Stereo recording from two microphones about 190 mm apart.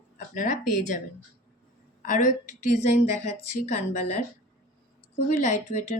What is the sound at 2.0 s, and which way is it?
A woman's voice, 40° left (ahead or behind).